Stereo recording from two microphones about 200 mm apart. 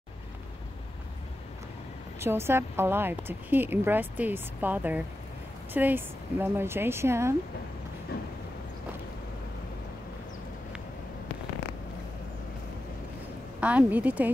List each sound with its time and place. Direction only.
2.1 s a woman's voice: 10° right (ahead or behind)
8.1 s train: 50° left (ahead or behind)
13.6 s a woman's voice: 5° right (ahead or behind)